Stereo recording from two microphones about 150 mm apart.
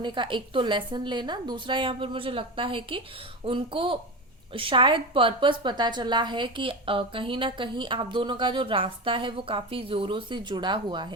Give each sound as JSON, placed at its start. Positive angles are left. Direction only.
{"t": 0.0, "sound": "a woman's voice", "side_deg": -30}